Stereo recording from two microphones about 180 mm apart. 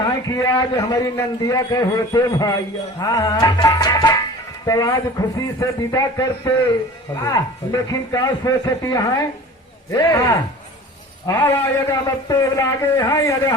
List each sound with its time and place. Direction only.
0.3 s a man's voice: 20° left (ahead or behind)